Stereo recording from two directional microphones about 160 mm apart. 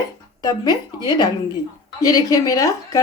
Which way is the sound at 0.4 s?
25° left (ahead or behind).